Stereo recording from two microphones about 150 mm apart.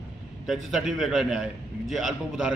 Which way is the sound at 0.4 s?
Centre (ahead or behind).